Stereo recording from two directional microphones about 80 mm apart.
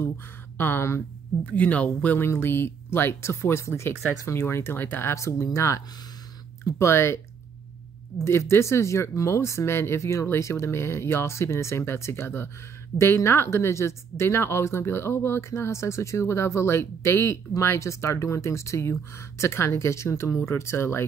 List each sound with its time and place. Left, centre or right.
0.6 s speech: left
1.4 s speech: centre
2.2 s speech: left
8.2 s speech: left